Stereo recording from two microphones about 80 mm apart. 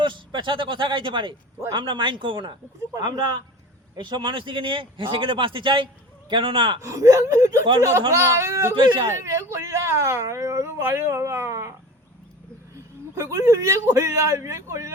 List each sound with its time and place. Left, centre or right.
0.0 s a man's voice: right
3.0 s a man's voice: right
6.8 s speech: right
12.7 s a man's voice: right